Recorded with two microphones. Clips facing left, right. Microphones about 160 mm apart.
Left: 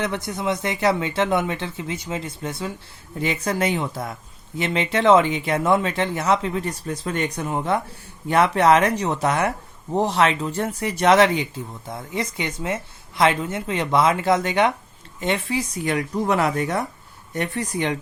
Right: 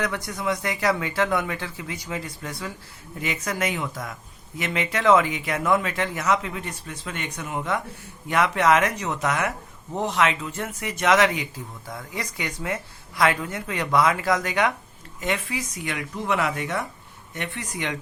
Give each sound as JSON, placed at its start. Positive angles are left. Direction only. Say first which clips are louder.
{"t": 0.0, "sound": "speech", "louder": "left 2 dB", "side_deg": 25}